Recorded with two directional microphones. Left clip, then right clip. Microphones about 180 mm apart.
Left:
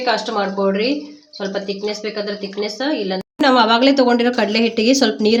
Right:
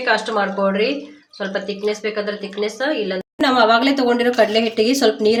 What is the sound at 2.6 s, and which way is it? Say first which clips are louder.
A woman's voice: right 1 dB; 60° left (ahead or behind).